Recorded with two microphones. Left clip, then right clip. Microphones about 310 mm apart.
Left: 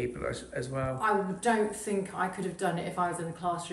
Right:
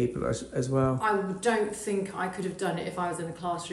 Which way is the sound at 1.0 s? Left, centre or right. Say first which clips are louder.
Right 1 dB; centre.